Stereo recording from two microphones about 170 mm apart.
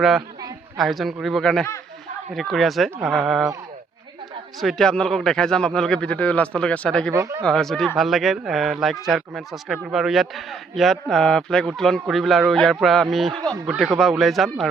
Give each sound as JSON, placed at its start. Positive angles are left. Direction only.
{"t": 0.0, "sound": "speech", "side_deg": 0}
{"t": 4.6, "sound": "speech", "side_deg": 0}
{"t": 7.1, "sound": "speech", "side_deg": -15}
{"t": 7.4, "sound": "speech", "side_deg": 5}